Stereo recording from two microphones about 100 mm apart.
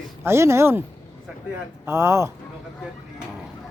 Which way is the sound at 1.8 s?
25° right (ahead or behind).